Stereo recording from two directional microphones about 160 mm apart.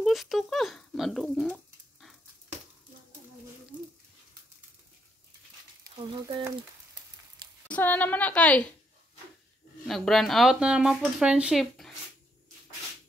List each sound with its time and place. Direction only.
0.0 s a sound: centre (ahead or behind)
5.9 s speech: 30° right (ahead or behind)
7.6 s a woman's voice: 10° left (ahead or behind)
9.8 s speech: centre (ahead or behind)